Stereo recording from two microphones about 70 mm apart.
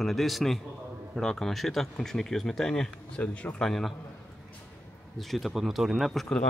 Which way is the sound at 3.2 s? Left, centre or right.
Left.